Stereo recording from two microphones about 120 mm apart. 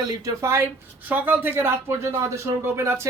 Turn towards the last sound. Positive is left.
turn(degrees=-25)  # may be behind; listen again after turning